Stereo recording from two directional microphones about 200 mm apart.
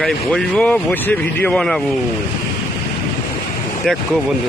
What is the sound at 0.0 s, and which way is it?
Speech, centre (ahead or behind).